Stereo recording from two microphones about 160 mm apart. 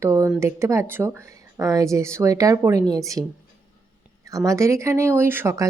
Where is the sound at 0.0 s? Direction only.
20° right (ahead or behind).